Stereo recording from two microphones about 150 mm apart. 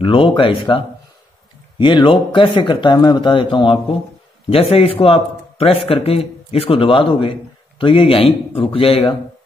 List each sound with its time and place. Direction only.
0.0 s a man's voice: 35° left (ahead or behind)